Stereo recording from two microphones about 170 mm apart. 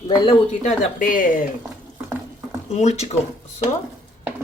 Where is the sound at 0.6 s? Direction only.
50° left (ahead or behind).